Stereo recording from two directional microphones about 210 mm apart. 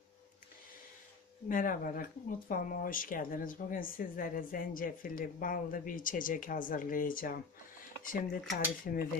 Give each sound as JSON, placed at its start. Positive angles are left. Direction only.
{"t": 1.5, "sound": "speech", "side_deg": 40}